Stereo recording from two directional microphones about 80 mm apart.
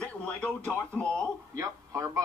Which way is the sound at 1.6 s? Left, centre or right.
Right.